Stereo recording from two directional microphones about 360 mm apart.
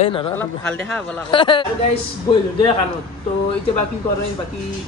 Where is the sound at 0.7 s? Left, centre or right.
Centre.